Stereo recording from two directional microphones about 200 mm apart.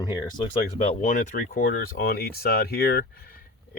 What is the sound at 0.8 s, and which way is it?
Speech, 35° left (ahead or behind).